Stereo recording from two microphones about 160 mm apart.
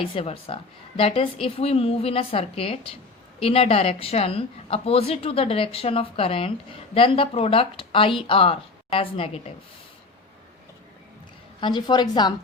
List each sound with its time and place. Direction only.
0.0 s a woman's voice: 35° left (ahead or behind)
11.6 s a woman's voice: 30° left (ahead or behind)